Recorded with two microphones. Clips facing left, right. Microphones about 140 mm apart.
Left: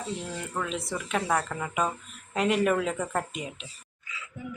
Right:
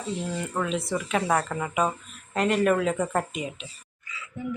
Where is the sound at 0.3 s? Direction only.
5° right (ahead or behind).